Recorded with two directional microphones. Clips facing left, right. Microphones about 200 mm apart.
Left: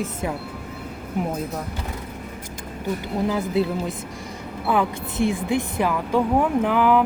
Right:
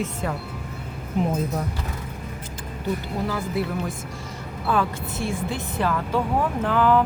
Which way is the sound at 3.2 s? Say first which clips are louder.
Left 6 dB; 20° left (ahead or behind).